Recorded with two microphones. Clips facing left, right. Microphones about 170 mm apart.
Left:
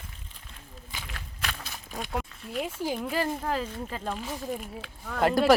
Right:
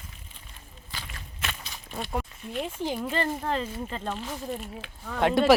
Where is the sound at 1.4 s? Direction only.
Centre (ahead or behind).